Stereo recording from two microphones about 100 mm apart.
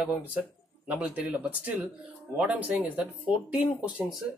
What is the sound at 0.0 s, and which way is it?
Speech, 15° right (ahead or behind).